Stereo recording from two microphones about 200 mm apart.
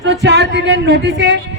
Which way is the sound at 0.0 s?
55° right (ahead or behind).